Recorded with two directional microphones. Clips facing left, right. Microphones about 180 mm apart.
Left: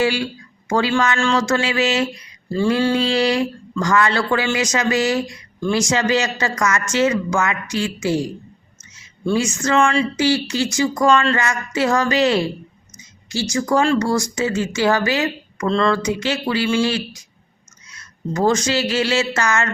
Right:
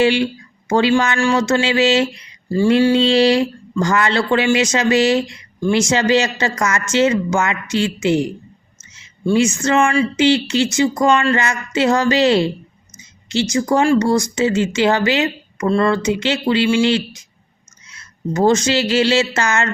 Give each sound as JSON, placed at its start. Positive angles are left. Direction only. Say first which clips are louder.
{"t": 0.0, "sound": "speech", "louder": "right 4 dB", "side_deg": -25}
{"t": 9.3, "sound": "a woman's voice", "louder": "right 3 dB", "side_deg": -25}
{"t": 15.6, "sound": "speech", "louder": "right 2 dB", "side_deg": -10}
{"t": 16.0, "sound": "speech", "louder": "right 3 dB", "side_deg": -25}